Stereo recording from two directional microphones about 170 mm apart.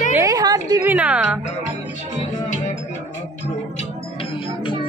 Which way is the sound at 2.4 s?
40° left (ahead or behind).